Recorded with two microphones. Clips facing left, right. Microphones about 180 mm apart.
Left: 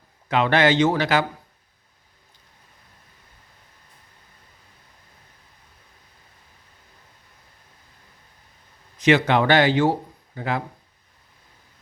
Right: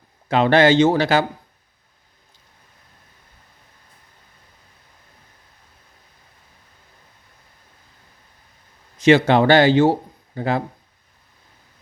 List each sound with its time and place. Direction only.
0.3 s speech: 30° right (ahead or behind)
9.0 s speech: 30° right (ahead or behind)